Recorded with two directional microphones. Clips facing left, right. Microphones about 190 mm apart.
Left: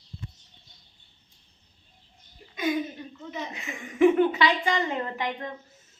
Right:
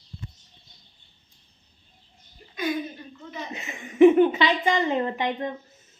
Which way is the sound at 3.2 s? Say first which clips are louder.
Left 2 dB; 15° left (ahead or behind).